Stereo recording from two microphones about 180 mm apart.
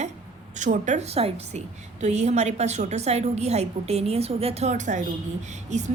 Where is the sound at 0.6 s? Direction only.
45° right (ahead or behind).